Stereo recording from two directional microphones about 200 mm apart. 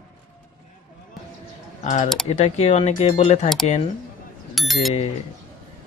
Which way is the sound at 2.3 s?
35° left (ahead or behind).